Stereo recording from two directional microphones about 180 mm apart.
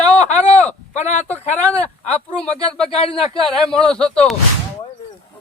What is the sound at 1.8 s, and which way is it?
Speech, 5° left (ahead or behind).